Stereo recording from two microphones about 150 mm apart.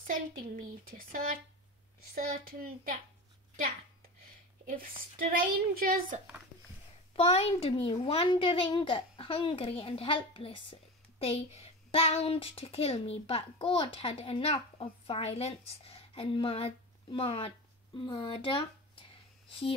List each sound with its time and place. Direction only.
0.0 s a woman's voice: 65° right (ahead or behind)
4.6 s a woman's voice: 65° right (ahead or behind)
7.2 s a child's voice: 40° left (ahead or behind)